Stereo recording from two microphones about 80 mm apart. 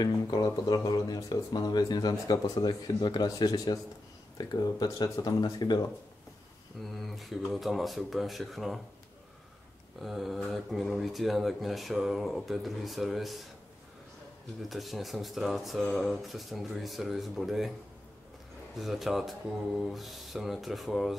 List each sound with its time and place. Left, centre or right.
0.0 s speech: left
2.7 s speech: left
7.0 s speech: centre
9.9 s speech: centre
14.6 s speech: centre
18.8 s speech: centre